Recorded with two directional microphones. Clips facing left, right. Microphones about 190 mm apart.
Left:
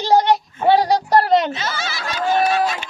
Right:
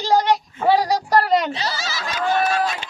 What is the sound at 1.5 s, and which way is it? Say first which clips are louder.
Speech: even; 35° right (ahead or behind).